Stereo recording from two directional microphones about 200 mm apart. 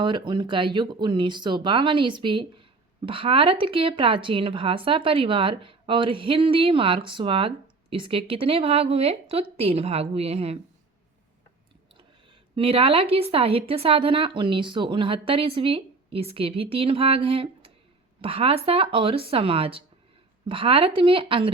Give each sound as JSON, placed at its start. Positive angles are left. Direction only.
{"t": 0.0, "sound": "a woman's voice", "side_deg": -25}
{"t": 12.5, "sound": "a woman's voice", "side_deg": -30}